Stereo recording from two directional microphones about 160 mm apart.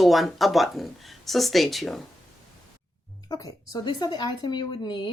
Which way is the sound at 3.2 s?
25° left (ahead or behind).